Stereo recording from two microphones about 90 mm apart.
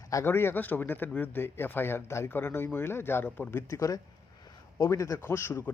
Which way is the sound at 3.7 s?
35° left (ahead or behind).